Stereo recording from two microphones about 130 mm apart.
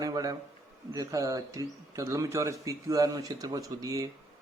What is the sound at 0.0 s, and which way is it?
A man's voice, 30° right (ahead or behind).